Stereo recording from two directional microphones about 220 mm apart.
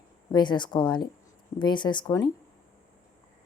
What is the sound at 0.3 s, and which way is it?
Speech, 20° left (ahead or behind).